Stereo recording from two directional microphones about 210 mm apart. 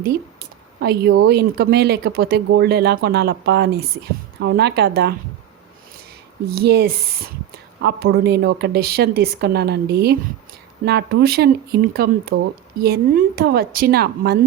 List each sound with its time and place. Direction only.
0.8 s speech: 50° right (ahead or behind)
6.6 s speech: 50° right (ahead or behind)